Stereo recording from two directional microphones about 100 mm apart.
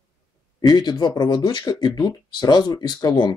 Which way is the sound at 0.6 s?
45° left (ahead or behind).